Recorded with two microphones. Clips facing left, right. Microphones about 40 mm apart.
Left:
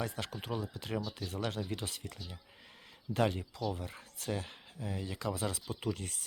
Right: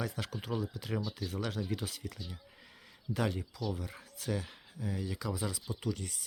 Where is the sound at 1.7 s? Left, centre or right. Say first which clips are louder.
Right 2 dB; left.